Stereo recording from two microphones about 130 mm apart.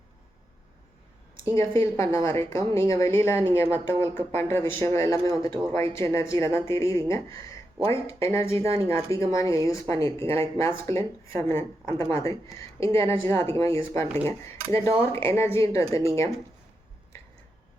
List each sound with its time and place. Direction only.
1.7 s a woman's voice: 20° left (ahead or behind)